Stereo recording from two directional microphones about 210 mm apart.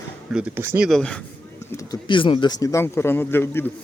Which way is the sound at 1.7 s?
20° left (ahead or behind).